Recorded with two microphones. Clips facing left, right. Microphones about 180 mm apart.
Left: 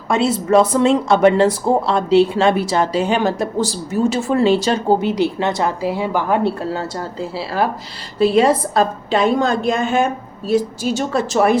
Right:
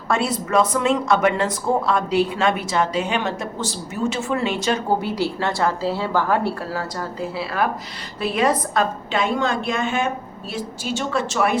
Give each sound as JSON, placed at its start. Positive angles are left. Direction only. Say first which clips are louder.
{"t": 0.1, "sound": "speech", "louder": "left 6 dB", "side_deg": 25}
{"t": 4.9, "sound": "a woman's voice", "louder": "left 5 dB", "side_deg": 20}